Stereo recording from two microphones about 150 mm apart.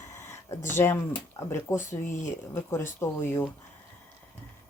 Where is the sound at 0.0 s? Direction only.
20° left (ahead or behind).